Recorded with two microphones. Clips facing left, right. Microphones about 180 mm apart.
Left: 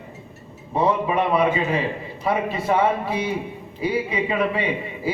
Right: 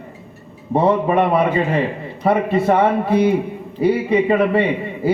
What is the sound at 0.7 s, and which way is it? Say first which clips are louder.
Speech: right 5 dB; 55° right (ahead or behind).